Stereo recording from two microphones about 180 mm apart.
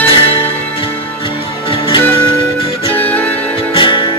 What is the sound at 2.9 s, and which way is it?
Music, 10° left (ahead or behind).